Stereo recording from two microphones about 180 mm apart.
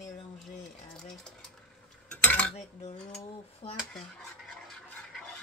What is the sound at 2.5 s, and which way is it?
Speech, 35° left (ahead or behind).